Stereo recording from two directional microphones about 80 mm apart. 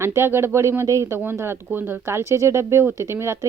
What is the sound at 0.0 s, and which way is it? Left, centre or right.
Speech, right.